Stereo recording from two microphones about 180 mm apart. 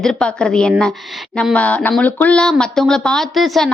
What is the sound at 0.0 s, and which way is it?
Speech, 5° left (ahead or behind).